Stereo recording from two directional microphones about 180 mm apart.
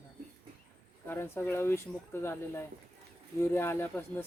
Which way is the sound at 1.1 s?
15° left (ahead or behind).